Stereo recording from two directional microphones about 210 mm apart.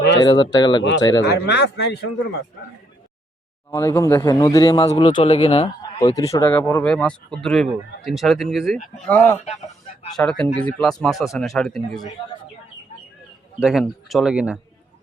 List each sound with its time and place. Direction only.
0.2 s speech: 20° left (ahead or behind)
0.8 s speech: 60° left (ahead or behind)
3.7 s speech: 15° left (ahead or behind)
6.1 s speech: 15° left (ahead or behind)
13.6 s speech: centre (ahead or behind)